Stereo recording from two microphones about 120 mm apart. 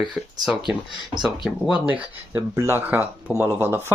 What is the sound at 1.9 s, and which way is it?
Speech, 15° right (ahead or behind).